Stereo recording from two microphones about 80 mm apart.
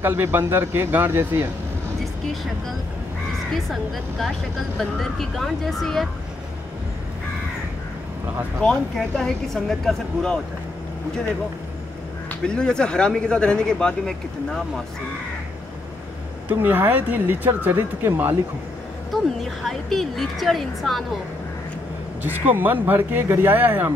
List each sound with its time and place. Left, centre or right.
0.0 s speech: right
4.7 s speech: centre
8.5 s speech: centre
12.4 s speech: centre
16.4 s speech: right
19.6 s speech: centre
22.2 s speech: right